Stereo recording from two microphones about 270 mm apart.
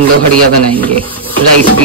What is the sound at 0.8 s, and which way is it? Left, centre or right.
Speech, centre.